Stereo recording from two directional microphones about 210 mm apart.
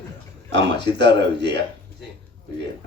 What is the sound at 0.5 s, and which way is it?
Speech, 55° right (ahead or behind).